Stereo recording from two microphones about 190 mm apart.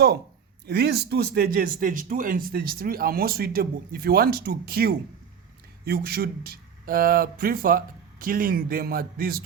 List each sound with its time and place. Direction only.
0.7 s speech: 60° right (ahead or behind)